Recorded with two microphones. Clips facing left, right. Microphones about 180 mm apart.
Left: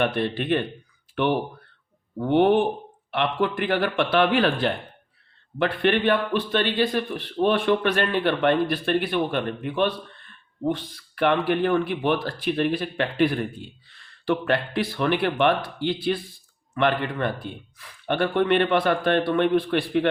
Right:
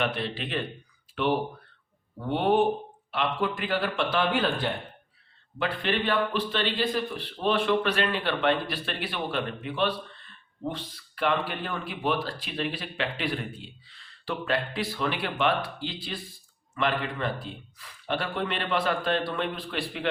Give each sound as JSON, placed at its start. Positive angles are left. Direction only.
{"t": 0.0, "sound": "speech", "side_deg": 55}
{"t": 2.3, "sound": "speech", "side_deg": 60}
{"t": 5.5, "sound": "speech", "side_deg": 60}